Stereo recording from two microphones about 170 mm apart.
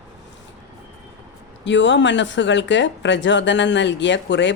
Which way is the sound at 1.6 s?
90° left.